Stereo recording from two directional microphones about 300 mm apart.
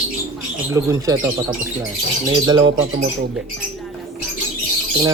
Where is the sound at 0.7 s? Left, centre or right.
Centre.